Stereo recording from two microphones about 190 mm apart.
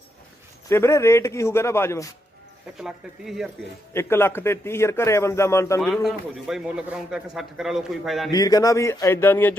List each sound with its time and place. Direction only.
0.7 s a man's voice: 15° left (ahead or behind)
2.7 s a man's voice: centre (ahead or behind)
3.9 s a man's voice: 10° left (ahead or behind)
5.8 s a man's voice: centre (ahead or behind)
8.3 s a man's voice: 20° left (ahead or behind)